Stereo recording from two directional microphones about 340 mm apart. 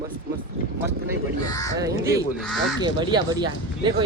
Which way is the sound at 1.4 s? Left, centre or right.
Centre.